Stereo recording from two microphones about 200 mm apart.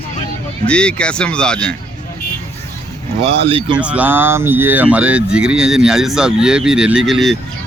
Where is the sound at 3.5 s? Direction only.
25° right (ahead or behind).